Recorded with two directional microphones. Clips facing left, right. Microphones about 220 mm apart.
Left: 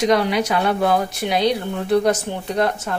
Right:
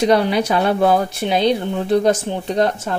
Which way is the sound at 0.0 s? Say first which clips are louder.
Right 2 dB; 30° right (ahead or behind).